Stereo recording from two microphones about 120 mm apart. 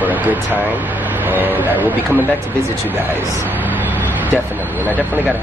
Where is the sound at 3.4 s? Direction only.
15° right (ahead or behind).